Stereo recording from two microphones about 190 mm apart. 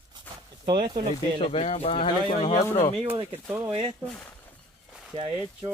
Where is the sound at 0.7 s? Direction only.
25° right (ahead or behind).